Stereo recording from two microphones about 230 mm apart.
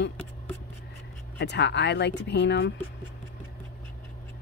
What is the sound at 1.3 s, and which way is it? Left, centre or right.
Speech, left.